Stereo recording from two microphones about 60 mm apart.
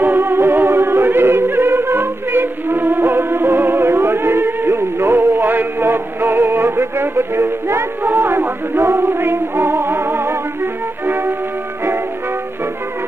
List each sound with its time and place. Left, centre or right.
0.0 s music: right